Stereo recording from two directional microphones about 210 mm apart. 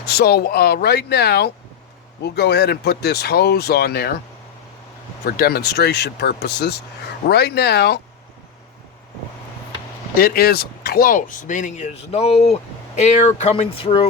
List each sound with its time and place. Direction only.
0.1 s speech: 50° left (ahead or behind)
5.2 s speech: 45° left (ahead or behind)
10.2 s speech: 45° left (ahead or behind); by 14.1 s 25° left (ahead or behind)